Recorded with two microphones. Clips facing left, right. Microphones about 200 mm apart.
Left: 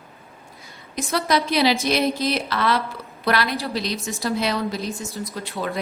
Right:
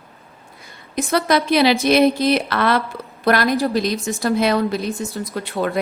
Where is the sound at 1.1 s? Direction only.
60° right (ahead or behind).